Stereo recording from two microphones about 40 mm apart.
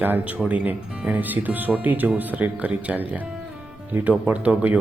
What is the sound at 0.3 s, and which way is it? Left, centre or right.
Speech, right.